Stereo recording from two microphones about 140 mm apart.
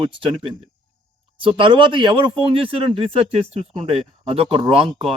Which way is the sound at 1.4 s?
35° right (ahead or behind).